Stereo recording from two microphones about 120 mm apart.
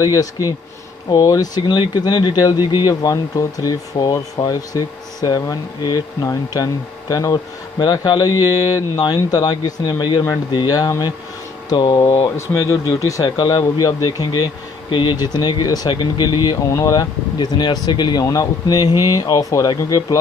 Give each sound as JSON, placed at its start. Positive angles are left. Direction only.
{"t": 0.0, "sound": "speech", "side_deg": 30}